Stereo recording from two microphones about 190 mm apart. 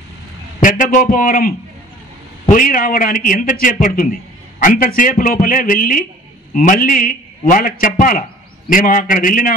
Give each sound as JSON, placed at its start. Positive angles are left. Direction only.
{"t": 0.6, "sound": "a man's voice", "side_deg": 45}
{"t": 2.5, "sound": "a man's voice", "side_deg": 50}